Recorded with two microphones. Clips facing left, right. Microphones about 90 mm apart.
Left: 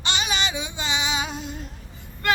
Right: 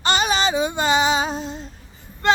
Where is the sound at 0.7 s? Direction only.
45° right (ahead or behind).